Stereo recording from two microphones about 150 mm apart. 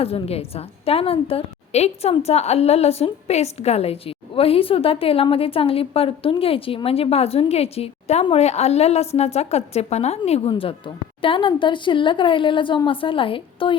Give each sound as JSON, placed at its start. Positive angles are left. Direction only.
{"t": 0.0, "sound": "a woman's voice", "side_deg": 40}